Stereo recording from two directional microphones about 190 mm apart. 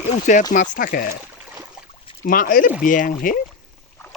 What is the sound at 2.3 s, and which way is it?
Speech, 45° left (ahead or behind).